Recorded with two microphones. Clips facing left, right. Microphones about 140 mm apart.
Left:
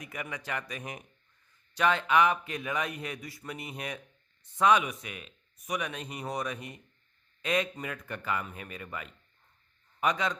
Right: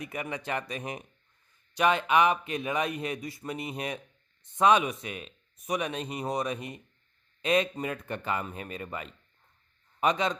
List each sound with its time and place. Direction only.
0.0 s speech: 25° right (ahead or behind)